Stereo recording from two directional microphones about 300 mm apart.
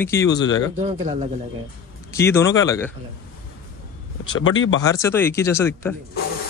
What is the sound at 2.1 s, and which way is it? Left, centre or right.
Speech, centre.